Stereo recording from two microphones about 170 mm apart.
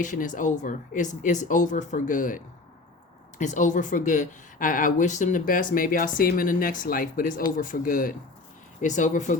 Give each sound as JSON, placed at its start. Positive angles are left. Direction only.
{"t": 0.0, "sound": "speech", "side_deg": 50}